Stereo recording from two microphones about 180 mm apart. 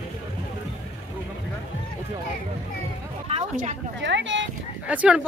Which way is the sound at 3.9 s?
85° right.